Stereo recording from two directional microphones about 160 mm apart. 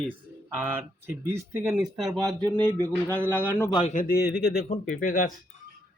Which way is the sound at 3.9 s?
70° left (ahead or behind).